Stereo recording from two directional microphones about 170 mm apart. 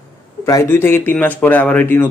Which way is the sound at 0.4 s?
15° left (ahead or behind).